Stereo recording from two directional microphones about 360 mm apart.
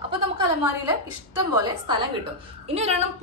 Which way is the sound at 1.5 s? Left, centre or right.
Centre.